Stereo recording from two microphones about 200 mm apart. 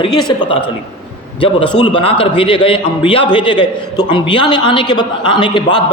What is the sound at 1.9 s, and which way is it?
A man's voice, 25° left (ahead or behind).